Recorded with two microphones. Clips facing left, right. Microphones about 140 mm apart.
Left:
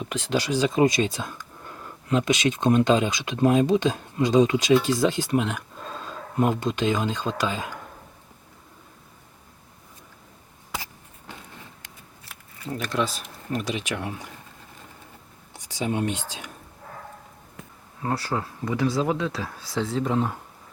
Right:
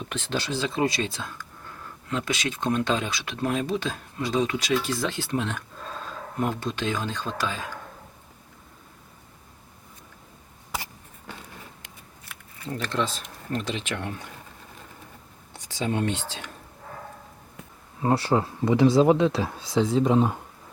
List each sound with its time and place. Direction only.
0.0 s speech: 10° left (ahead or behind)
12.6 s speech: 10° left (ahead or behind)
15.5 s speech: 15° left (ahead or behind)
18.0 s speech: 25° right (ahead or behind)